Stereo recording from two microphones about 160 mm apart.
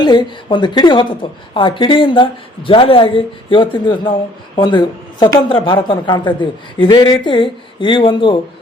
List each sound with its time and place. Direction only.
0.0 s a woman's voice: 30° left (ahead or behind)